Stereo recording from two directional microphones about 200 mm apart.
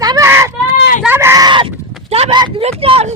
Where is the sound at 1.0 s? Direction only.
10° right (ahead or behind); by 3.1 s 30° right (ahead or behind).